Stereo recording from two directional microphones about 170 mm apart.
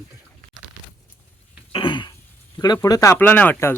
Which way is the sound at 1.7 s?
30° left (ahead or behind).